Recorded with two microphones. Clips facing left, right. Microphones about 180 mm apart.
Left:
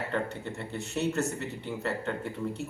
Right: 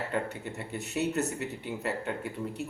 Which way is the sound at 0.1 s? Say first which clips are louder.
Left 1 dB; 15° right (ahead or behind).